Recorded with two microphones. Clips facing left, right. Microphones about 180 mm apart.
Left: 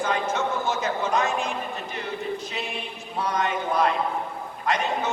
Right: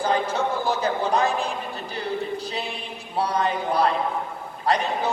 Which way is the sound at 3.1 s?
35° right (ahead or behind).